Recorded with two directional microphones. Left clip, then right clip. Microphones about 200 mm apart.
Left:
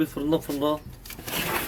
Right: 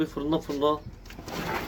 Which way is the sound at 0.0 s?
40° left (ahead or behind).